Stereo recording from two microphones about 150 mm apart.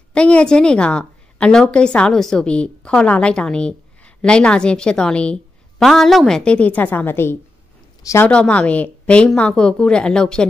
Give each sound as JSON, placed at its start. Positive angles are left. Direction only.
{"t": 0.1, "sound": "a woman's voice", "side_deg": 5}
{"t": 8.3, "sound": "a woman's voice", "side_deg": 10}